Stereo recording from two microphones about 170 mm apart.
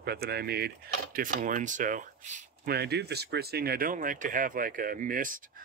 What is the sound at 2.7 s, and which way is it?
Speech, 75° right (ahead or behind).